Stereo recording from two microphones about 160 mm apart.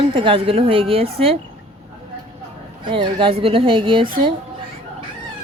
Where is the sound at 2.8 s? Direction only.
30° right (ahead or behind).